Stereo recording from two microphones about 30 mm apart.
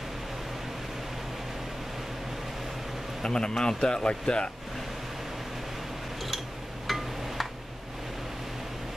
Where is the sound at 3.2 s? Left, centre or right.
Left.